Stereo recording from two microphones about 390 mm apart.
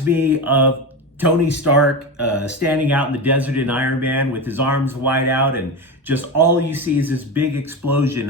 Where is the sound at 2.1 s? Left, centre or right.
Right.